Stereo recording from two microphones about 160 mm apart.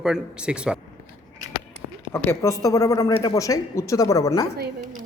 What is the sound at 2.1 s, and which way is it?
Speech, 15° left (ahead or behind).